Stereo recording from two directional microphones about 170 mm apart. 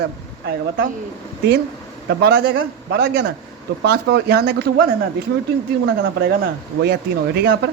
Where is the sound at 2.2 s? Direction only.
70° right (ahead or behind).